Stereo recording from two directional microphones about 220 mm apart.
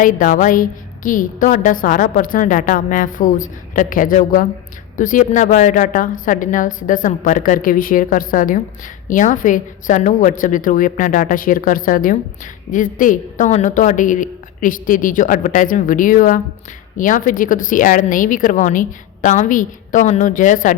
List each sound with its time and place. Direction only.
0.0 s a woman's voice: 35° left (ahead or behind)